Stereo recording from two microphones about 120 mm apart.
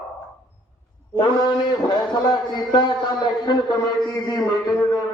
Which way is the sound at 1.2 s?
35° left (ahead or behind).